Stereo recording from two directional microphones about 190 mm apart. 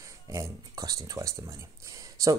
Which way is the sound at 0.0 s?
15° right (ahead or behind).